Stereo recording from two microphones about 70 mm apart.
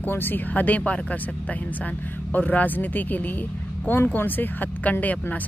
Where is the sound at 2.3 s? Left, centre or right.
Left.